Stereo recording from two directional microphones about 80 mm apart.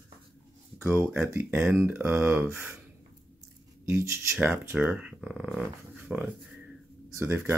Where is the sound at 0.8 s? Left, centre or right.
Right.